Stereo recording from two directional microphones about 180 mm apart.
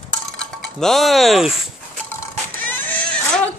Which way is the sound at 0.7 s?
Centre (ahead or behind).